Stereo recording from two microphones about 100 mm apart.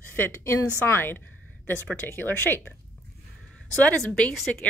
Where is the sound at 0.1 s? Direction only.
25° left (ahead or behind).